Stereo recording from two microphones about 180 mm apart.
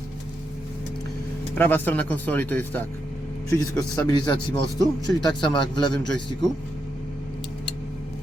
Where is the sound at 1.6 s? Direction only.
10° left (ahead or behind).